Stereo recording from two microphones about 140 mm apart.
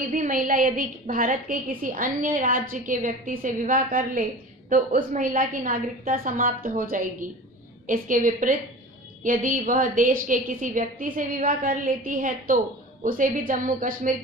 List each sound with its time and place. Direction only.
0.1 s a woman's voice: 70° right (ahead or behind)
4.6 s a woman's voice: 65° right (ahead or behind)